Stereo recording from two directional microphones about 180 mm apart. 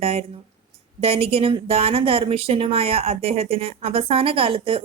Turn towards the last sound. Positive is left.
turn(degrees=-30)  # may be behind; listen again after turning